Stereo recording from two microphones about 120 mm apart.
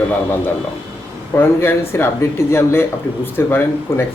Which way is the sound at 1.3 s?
20° left (ahead or behind).